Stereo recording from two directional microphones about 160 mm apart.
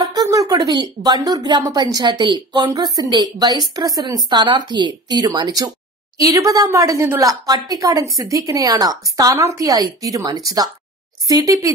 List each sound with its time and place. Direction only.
0.0 s a woman's voice: 25° right (ahead or behind)